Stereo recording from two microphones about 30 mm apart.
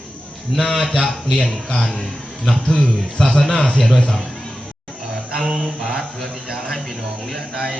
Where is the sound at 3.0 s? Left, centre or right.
Centre.